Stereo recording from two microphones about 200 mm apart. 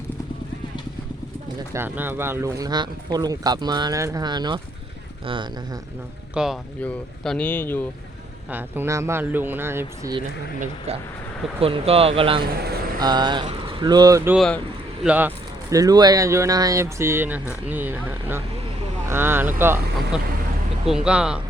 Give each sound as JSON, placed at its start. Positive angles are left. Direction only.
{"t": 1.7, "sound": "speech", "side_deg": -10}
{"t": 6.3, "sound": "speech", "side_deg": 0}
{"t": 8.4, "sound": "speech", "side_deg": -10}
{"t": 11.6, "sound": "speech", "side_deg": -30}
{"t": 14.3, "sound": "speech", "side_deg": 5}
{"t": 15.0, "sound": "speech", "side_deg": -10}
{"t": 20.8, "sound": "speech", "side_deg": -5}